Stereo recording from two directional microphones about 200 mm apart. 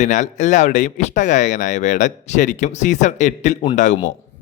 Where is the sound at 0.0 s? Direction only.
35° left (ahead or behind).